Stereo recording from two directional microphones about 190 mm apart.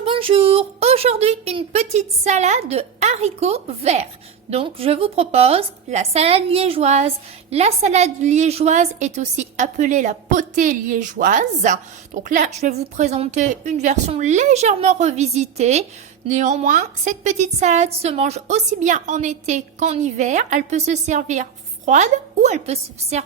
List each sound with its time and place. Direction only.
0.0 s a woman's voice: 30° right (ahead or behind)